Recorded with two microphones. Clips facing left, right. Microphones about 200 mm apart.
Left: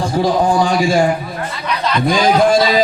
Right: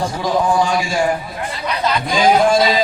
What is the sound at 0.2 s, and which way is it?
Speech, 35° left (ahead or behind).